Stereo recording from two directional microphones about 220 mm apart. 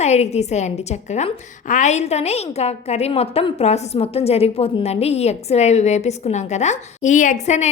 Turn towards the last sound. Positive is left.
turn(degrees=35)  # may be behind; listen again after turning